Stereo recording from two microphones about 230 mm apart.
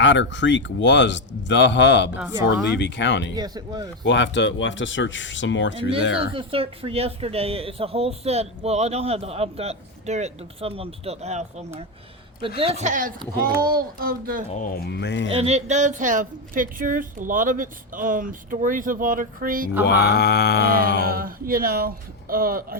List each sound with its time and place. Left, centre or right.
0.0 s speech: left
3.3 s speech: centre
4.0 s speech: left
6.1 s speech: right
14.5 s speech: left
15.3 s speech: right
19.8 s speech: left
21.1 s speech: right